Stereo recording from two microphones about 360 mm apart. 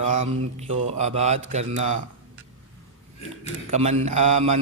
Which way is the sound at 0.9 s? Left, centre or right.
Centre.